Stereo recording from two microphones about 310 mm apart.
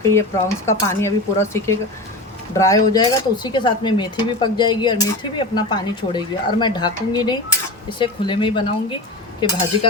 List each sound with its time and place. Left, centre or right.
0.1 s speech: centre